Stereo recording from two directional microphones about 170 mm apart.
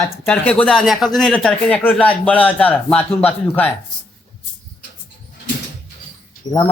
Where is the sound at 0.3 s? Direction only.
5° left (ahead or behind).